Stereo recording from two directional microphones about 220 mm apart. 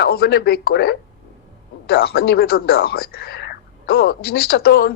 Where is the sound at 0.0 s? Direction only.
45° left (ahead or behind).